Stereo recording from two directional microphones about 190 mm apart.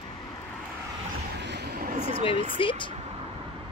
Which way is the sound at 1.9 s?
40° right (ahead or behind).